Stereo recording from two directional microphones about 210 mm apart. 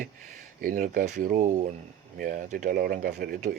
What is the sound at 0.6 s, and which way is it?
Speech, 40° right (ahead or behind).